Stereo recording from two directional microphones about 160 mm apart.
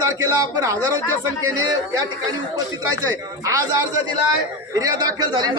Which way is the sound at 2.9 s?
20° right (ahead or behind).